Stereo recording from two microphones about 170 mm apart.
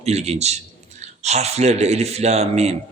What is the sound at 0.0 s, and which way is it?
A man's voice, 40° right (ahead or behind).